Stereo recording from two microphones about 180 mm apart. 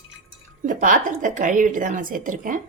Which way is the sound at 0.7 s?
45° right (ahead or behind).